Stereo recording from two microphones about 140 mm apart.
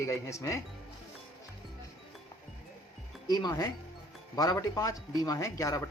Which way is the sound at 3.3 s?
25° left (ahead or behind).